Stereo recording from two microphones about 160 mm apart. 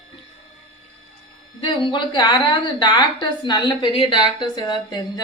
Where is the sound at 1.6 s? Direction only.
30° left (ahead or behind).